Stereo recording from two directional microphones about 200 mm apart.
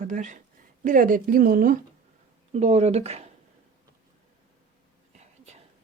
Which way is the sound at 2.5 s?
35° right (ahead or behind).